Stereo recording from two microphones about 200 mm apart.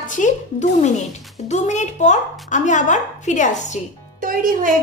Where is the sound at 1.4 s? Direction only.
35° left (ahead or behind).